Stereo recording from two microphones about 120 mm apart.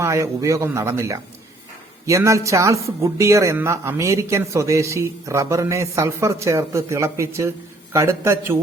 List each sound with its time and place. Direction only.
0.0 s speech: 25° right (ahead or behind)